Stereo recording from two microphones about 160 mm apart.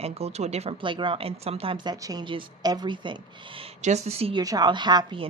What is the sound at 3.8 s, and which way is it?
A woman's voice, 45° right (ahead or behind).